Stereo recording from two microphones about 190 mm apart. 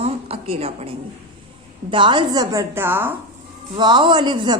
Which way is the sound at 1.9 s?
25° right (ahead or behind).